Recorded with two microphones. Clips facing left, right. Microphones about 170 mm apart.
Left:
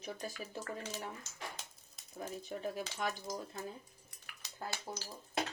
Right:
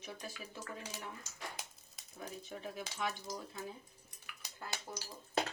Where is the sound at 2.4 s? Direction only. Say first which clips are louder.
Left 6 dB; 40° left (ahead or behind).